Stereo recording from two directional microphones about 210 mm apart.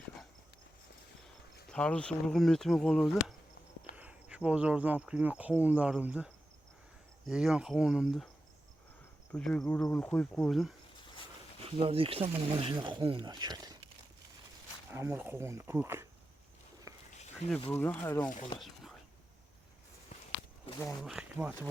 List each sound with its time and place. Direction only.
1.7 s speech: 5° left (ahead or behind)
9.3 s speech: 5° left (ahead or behind)
11.6 s speech: 25° right (ahead or behind)
14.8 s speech: 10° right (ahead or behind)
16.9 s a sound: 15° right (ahead or behind)
17.7 s speech: 10° left (ahead or behind)
18.6 s whispering: centre (ahead or behind)
21.0 s speech: 5° right (ahead or behind)